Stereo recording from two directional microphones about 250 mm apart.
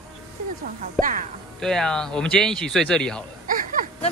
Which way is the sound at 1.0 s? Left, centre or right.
Centre.